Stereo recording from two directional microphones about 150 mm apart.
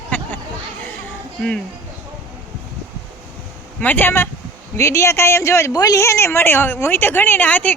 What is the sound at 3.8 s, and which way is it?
Speech, 15° left (ahead or behind).